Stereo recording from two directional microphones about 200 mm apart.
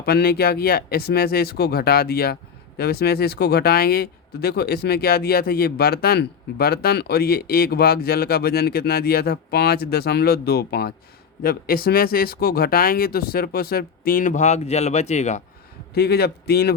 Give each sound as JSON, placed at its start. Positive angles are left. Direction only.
{"t": 0.0, "sound": "speech", "side_deg": 50}
{"t": 16.0, "sound": "speech", "side_deg": 50}